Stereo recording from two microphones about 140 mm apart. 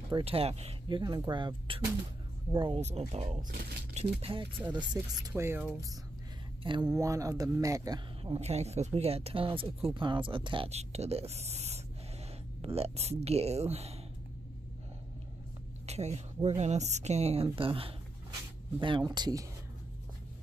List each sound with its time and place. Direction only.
0.1 s speech: 45° right (ahead or behind)
0.8 s speech: 30° right (ahead or behind)
3.1 s speech: 50° right (ahead or behind)
4.9 s speech: 20° right (ahead or behind)
6.6 s speech: 35° right (ahead or behind)
6.9 s speech: 25° right (ahead or behind)
8.2 s speech: 45° right (ahead or behind)
15.9 s speech: 50° right (ahead or behind); by 19.4 s 30° right (ahead or behind)